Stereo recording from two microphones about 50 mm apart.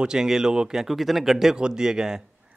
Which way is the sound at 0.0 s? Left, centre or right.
Centre.